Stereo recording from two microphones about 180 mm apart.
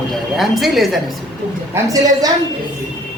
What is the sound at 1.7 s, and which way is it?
Speech, 20° right (ahead or behind).